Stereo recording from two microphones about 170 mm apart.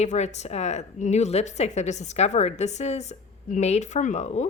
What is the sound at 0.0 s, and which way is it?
A woman's voice, 40° left (ahead or behind).